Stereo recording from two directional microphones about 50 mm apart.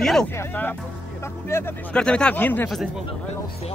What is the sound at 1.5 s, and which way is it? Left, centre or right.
Speech, left.